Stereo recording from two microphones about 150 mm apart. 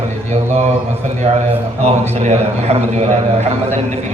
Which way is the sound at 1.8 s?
45° right (ahead or behind).